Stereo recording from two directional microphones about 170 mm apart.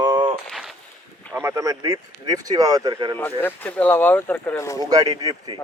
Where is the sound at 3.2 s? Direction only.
10° left (ahead or behind).